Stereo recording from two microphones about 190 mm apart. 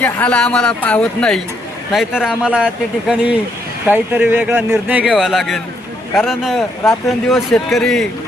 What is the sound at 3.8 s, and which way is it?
Speech, 10° right (ahead or behind).